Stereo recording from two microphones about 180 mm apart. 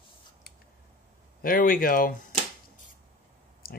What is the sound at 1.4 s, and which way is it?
Speech, 50° left (ahead or behind).